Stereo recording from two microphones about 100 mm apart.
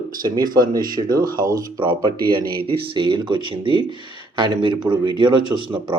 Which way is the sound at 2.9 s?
55° right (ahead or behind).